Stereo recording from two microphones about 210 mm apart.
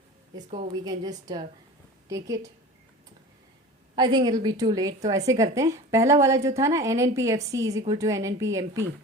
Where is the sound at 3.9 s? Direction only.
20° right (ahead or behind).